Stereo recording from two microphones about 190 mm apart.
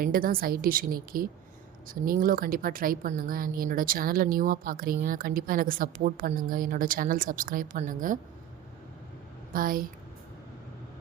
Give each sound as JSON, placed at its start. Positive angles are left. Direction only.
{"t": 0.0, "sound": "a woman's voice", "side_deg": -50}
{"t": 9.5, "sound": "a woman's voice", "side_deg": -50}